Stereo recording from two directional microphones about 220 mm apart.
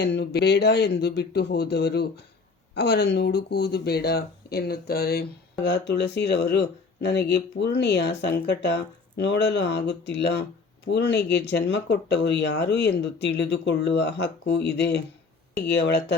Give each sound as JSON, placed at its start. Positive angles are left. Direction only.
{"t": 0.0, "sound": "speech", "side_deg": 50}